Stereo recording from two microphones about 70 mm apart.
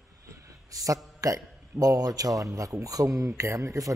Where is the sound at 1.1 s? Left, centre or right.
Right.